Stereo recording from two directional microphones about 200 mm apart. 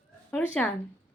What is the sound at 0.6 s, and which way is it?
Speech, 5° left (ahead or behind).